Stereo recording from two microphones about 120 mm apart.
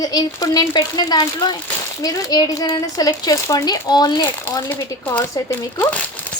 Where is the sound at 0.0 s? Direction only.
35° left (ahead or behind).